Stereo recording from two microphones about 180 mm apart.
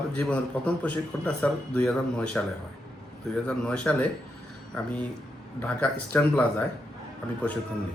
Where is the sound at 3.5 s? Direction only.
5° left (ahead or behind).